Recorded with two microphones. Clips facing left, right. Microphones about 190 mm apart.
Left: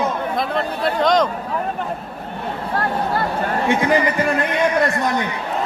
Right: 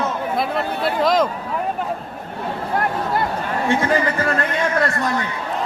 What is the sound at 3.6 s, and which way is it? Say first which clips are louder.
A man's voice: left 1 dB; 15° left (ahead or behind).